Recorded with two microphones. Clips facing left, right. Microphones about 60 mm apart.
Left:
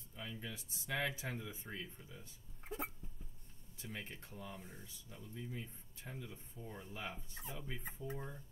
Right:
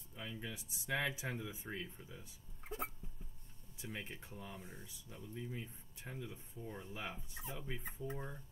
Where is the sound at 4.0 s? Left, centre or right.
Right.